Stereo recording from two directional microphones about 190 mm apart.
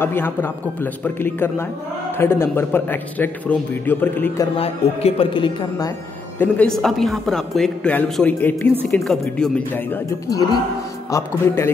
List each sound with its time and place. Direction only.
0.0 s a man's voice: 10° left (ahead or behind)
4.6 s speech: 30° left (ahead or behind)
6.4 s a man's voice: 5° left (ahead or behind)